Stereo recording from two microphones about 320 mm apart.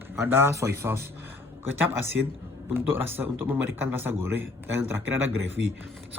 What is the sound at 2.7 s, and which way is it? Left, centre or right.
Speech, centre.